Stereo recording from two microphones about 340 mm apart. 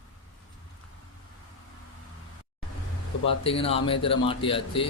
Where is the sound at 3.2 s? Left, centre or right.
Centre.